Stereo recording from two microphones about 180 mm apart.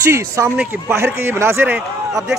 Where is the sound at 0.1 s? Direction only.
15° right (ahead or behind).